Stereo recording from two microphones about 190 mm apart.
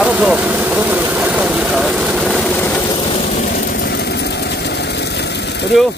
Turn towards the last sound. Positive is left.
turn(degrees=65)  # may be behind; listen again after turning